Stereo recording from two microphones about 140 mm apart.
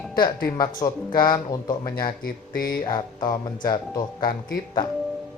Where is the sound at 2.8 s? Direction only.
30° left (ahead or behind).